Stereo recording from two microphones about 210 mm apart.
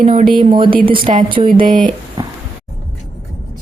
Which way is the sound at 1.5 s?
40° right (ahead or behind).